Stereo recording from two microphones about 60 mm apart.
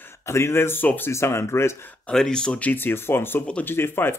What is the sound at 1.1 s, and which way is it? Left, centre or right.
Speech, left.